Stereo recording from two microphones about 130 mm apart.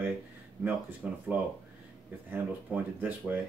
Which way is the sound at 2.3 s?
15° right (ahead or behind).